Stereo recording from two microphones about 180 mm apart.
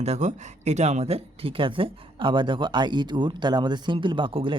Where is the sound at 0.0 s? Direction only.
40° right (ahead or behind).